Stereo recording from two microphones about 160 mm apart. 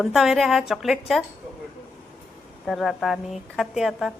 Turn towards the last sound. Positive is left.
turn(degrees=0)  # may be behind; listen again after turning